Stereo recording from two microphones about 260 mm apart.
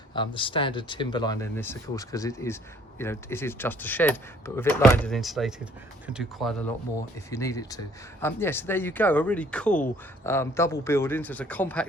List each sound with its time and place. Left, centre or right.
0.1 s speech: centre